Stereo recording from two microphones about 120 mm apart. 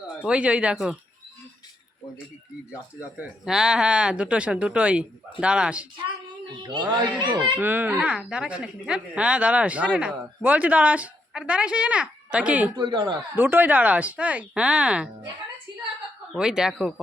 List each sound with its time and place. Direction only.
0.3 s speech: 10° right (ahead or behind)
3.0 s speech: 15° right (ahead or behind)
6.6 s speech: 40° right (ahead or behind)
7.5 s speech: 15° right (ahead or behind)
12.7 s speech: 40° right (ahead or behind)
13.3 s speech: 15° right (ahead or behind)
16.3 s speech: 5° right (ahead or behind)